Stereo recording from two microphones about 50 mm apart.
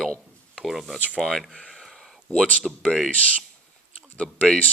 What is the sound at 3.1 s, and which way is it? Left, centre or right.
Speech, left.